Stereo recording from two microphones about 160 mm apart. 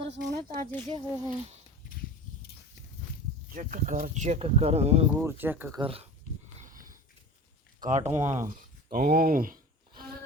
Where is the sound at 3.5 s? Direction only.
55° right (ahead or behind).